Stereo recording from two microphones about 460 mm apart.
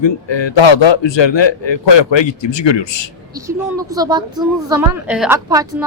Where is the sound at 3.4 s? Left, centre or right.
Centre.